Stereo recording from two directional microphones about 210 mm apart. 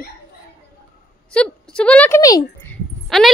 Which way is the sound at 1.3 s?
5° left (ahead or behind).